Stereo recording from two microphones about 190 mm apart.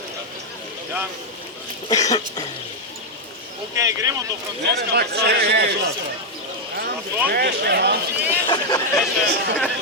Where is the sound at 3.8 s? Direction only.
15° right (ahead or behind).